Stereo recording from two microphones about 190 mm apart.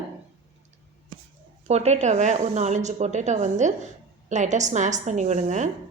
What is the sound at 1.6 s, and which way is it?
Speech, 35° right (ahead or behind).